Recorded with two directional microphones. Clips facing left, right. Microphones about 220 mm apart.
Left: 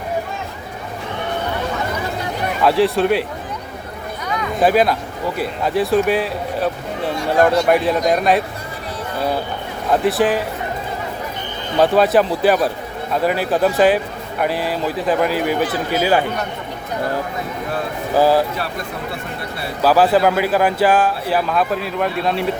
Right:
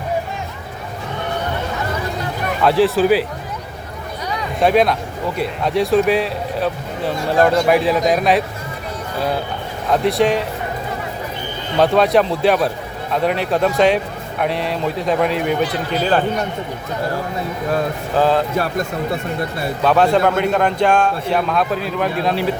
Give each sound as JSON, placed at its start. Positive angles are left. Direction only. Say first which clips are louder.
{"t": 2.6, "sound": "speech", "louder": "right 2 dB", "side_deg": 0}
{"t": 4.6, "sound": "speech", "louder": "right 1 dB", "side_deg": 0}
{"t": 9.9, "sound": "speech", "louder": "even", "side_deg": 0}
{"t": 11.8, "sound": "speech", "louder": "even", "side_deg": 0}
{"t": 18.1, "sound": "speech", "louder": "left 2 dB", "side_deg": 10}
{"t": 18.5, "sound": "speech", "louder": "right 6 dB", "side_deg": -45}
{"t": 19.8, "sound": "speech", "louder": "left 1 dB", "side_deg": 5}